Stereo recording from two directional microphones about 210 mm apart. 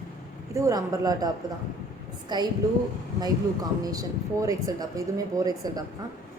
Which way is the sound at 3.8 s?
15° right (ahead or behind).